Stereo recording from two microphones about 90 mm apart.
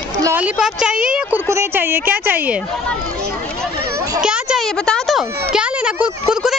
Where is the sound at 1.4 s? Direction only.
30° right (ahead or behind).